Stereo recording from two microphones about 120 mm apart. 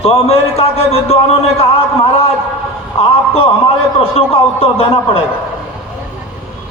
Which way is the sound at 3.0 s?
55° left (ahead or behind).